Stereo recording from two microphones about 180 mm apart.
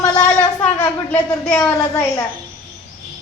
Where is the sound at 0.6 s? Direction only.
10° left (ahead or behind).